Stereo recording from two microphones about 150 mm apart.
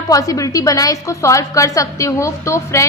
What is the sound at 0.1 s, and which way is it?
A woman's voice, 25° left (ahead or behind).